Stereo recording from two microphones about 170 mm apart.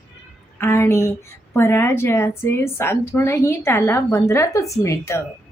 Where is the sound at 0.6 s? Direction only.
15° left (ahead or behind).